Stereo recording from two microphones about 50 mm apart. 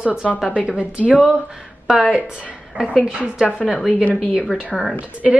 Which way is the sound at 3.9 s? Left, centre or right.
Left.